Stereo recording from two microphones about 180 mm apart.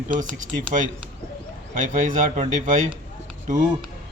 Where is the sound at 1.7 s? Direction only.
45° right (ahead or behind).